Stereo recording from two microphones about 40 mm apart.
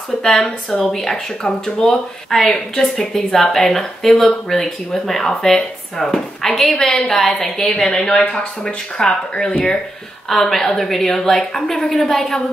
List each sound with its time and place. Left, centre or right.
0.2 s a woman's voice: centre
10.3 s a woman's voice: centre